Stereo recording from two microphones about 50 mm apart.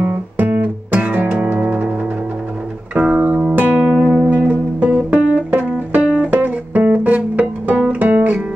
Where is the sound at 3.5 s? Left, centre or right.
Right.